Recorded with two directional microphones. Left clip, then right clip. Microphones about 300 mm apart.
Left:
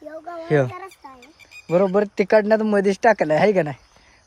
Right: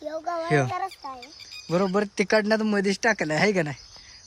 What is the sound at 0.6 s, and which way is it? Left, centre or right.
Speech, right.